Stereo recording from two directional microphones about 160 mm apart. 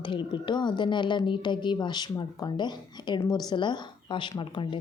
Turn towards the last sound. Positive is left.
turn(degrees=30)  # may be behind; listen again after turning